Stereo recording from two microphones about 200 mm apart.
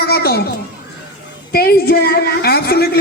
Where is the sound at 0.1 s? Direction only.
50° left (ahead or behind).